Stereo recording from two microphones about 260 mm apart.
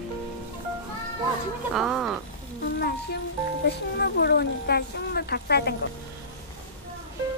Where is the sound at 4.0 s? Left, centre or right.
Left.